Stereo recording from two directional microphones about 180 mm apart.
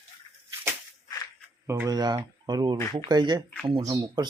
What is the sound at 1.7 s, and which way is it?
Speech, 15° right (ahead or behind).